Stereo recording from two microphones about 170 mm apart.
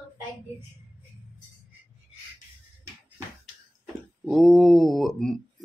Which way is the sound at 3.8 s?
Centre (ahead or behind).